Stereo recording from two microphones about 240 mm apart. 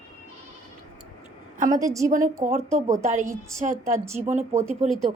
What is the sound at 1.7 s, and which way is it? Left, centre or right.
Speech, centre.